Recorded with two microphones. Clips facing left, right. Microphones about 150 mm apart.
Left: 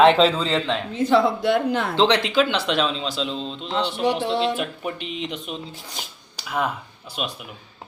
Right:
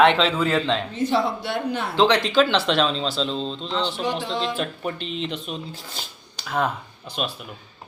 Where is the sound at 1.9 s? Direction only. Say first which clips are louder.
Right 2 dB; 20° left (ahead or behind).